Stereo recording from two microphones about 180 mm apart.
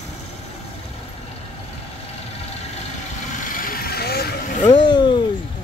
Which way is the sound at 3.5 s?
50° left (ahead or behind).